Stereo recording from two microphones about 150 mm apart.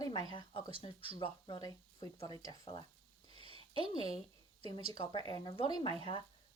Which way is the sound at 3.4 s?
30° left (ahead or behind).